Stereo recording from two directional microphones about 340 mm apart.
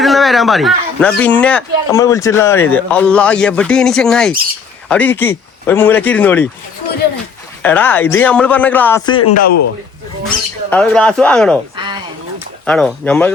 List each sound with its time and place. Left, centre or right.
0.0 s speech: centre
7.6 s speech: centre
9.2 s a man's voice: left
10.7 s speech: centre
11.8 s a sound: centre
12.6 s speech: centre